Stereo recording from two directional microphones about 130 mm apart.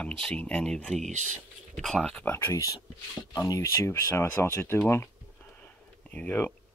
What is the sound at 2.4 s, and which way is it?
Speech, 25° left (ahead or behind).